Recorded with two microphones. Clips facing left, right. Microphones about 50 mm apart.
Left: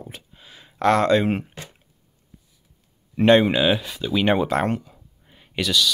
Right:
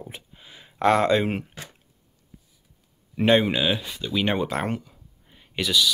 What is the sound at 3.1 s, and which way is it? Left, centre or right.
Speech, centre.